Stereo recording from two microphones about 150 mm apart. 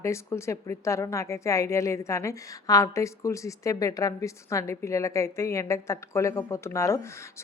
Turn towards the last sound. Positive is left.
turn(degrees=20)  # may be behind; listen again after turning